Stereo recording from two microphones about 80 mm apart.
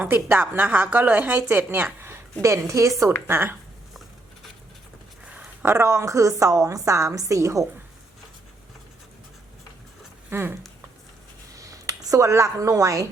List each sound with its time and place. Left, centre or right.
0.0 s a woman's voice: right
2.4 s a woman's voice: right
3.2 s a woman's voice: right
5.2 s a sound: centre
5.6 s a woman's voice: right
10.2 s speech: right
11.5 s speech: right